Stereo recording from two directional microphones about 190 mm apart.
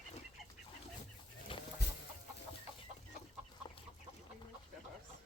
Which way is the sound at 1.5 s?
30° left (ahead or behind).